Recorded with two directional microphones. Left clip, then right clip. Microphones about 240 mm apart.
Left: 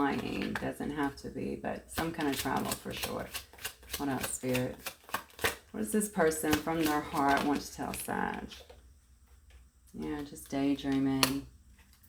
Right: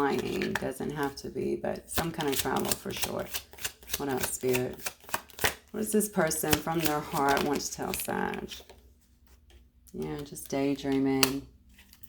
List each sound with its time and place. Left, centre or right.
0.0 s speech: right
10.0 s speech: right